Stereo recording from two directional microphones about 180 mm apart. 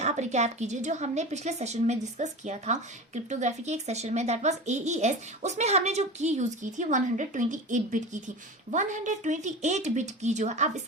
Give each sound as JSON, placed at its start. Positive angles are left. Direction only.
{"t": 0.0, "sound": "a child's voice", "side_deg": -40}